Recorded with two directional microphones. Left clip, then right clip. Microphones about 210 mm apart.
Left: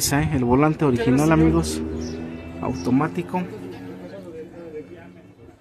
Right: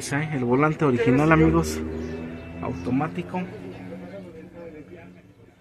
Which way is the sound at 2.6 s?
30° left (ahead or behind).